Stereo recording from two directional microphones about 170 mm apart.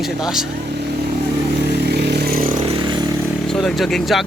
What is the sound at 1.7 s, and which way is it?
Vehicle, 75° right (ahead or behind).